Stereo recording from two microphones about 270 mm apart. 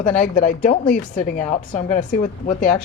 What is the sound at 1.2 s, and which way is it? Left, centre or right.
A woman's voice, left.